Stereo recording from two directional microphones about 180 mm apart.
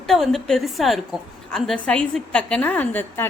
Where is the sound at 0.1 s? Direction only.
Centre (ahead or behind).